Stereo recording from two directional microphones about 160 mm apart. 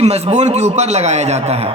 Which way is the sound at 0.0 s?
45° right (ahead or behind).